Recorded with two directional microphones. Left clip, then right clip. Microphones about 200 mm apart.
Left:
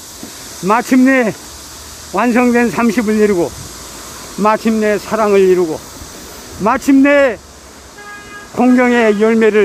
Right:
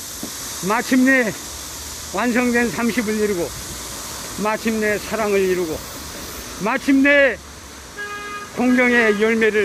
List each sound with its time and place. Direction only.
0.7 s speech: 30° left (ahead or behind)
8.5 s speech: 30° left (ahead or behind)